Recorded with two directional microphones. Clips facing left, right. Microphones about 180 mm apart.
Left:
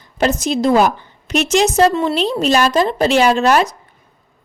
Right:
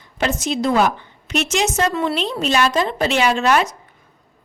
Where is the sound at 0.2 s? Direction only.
35° left (ahead or behind).